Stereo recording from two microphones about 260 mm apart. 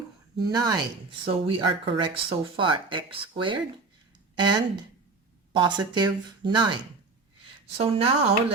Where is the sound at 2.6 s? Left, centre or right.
Centre.